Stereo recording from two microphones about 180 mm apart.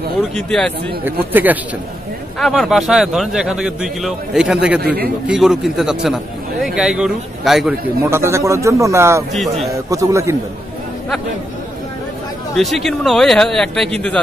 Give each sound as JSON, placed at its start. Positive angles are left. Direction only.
{"t": 0.4, "sound": "a man's voice", "side_deg": 5}
{"t": 1.3, "sound": "a man's voice", "side_deg": -10}
{"t": 2.3, "sound": "a man's voice", "side_deg": 0}
{"t": 8.0, "sound": "a man's voice", "side_deg": -15}
{"t": 9.3, "sound": "a man's voice", "side_deg": 0}
{"t": 9.8, "sound": "a man's voice", "side_deg": -20}
{"t": 12.5, "sound": "a man's voice", "side_deg": 0}